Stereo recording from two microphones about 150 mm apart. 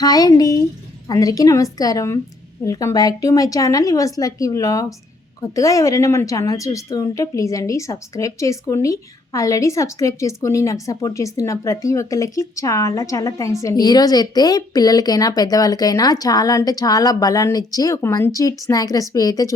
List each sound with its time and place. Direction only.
0.0 s a woman's voice: 25° left (ahead or behind)